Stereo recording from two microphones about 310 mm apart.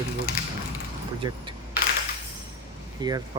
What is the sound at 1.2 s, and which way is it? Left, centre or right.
Speech, centre.